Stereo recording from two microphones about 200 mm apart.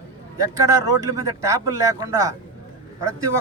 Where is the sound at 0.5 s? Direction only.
15° right (ahead or behind).